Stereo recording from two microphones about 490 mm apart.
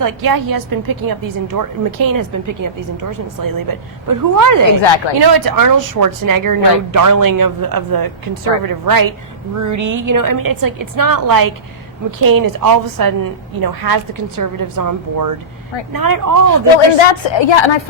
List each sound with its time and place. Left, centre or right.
0.0 s a woman's voice: right
4.8 s a woman's voice: left
5.2 s a woman's voice: right
16.7 s a woman's voice: left